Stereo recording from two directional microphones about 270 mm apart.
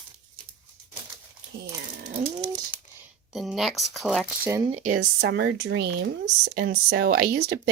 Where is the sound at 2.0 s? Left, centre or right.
Right.